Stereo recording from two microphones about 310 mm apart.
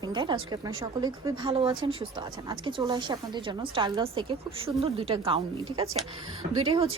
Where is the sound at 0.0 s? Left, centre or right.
Centre.